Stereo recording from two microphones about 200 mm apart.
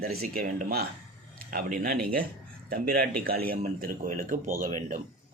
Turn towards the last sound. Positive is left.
turn(degrees=-45)  # may be behind; listen again after turning